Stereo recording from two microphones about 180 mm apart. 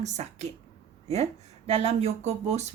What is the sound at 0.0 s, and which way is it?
Speech, 40° right (ahead or behind).